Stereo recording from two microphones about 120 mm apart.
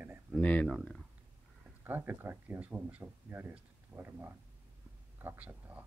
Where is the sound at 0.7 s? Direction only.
Centre (ahead or behind).